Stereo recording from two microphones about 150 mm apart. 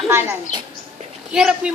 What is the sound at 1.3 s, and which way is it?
Speech, 5° right (ahead or behind).